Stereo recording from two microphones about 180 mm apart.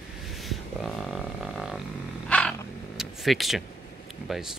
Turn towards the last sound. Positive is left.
turn(degrees=0)  # may be behind; listen again after turning